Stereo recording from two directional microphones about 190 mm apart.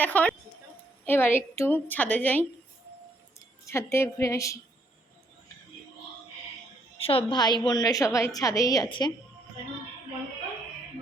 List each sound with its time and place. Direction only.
0.0 s a woman's voice: 10° left (ahead or behind)
3.7 s a woman's voice: 15° left (ahead or behind)
7.0 s a woman's voice: 30° left (ahead or behind)